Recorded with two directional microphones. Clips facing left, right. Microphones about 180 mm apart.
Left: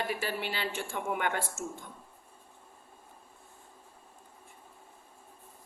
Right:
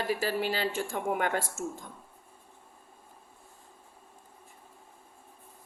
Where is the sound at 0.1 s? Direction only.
35° right (ahead or behind).